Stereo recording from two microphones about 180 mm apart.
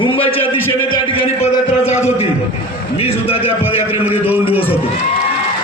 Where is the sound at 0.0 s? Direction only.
30° left (ahead or behind).